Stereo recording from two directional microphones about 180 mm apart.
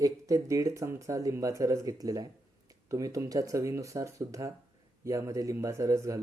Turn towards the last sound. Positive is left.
turn(degrees=-15)  # may be behind; listen again after turning